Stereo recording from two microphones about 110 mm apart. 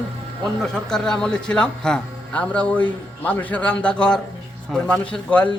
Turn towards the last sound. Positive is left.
turn(degrees=15)  # may be behind; listen again after turning